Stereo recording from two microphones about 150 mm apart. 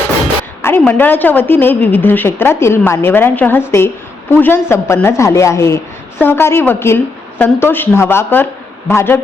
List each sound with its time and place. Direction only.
0.6 s a woman's voice: 15° left (ahead or behind)